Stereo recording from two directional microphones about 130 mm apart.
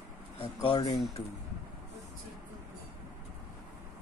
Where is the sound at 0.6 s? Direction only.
30° left (ahead or behind).